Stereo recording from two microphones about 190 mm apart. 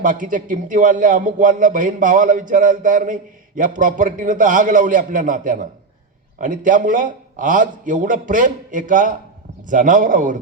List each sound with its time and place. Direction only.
0.0 s a man's voice: 45° right (ahead or behind)